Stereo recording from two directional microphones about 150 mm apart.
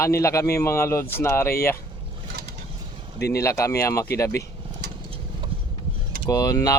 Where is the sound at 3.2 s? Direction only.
20° left (ahead or behind).